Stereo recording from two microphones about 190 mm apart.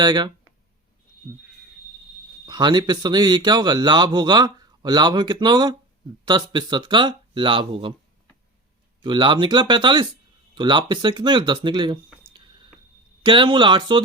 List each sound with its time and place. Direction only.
0.0 s speech: 20° right (ahead or behind)
2.5 s speech: 20° right (ahead or behind)
9.0 s speech: 25° right (ahead or behind)